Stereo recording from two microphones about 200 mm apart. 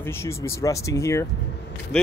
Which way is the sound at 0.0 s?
15° left (ahead or behind).